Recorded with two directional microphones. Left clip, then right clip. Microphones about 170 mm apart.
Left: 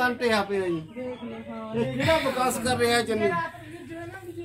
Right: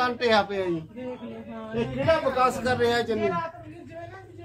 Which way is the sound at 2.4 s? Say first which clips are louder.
Right 2 dB; 20° left (ahead or behind).